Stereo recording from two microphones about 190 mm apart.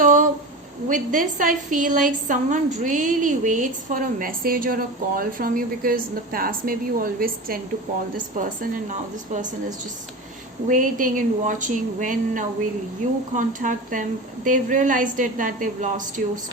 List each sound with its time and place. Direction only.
0.0 s a sound: 45° right (ahead or behind)
0.9 s a woman's voice: 45° right (ahead or behind)
10.7 s a woman's voice: 45° right (ahead or behind)